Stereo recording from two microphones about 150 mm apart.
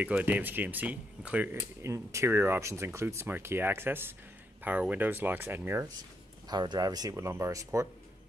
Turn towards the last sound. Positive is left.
turn(degrees=-20)  # may be behind; listen again after turning